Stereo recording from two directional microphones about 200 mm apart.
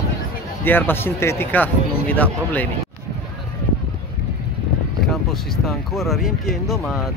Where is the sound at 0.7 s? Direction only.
10° left (ahead or behind).